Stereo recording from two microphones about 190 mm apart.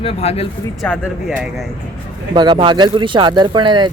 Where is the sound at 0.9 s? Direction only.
5° left (ahead or behind).